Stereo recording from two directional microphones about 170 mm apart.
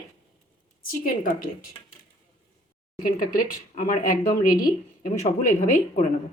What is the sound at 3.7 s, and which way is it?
A woman's voice, 50° left (ahead or behind).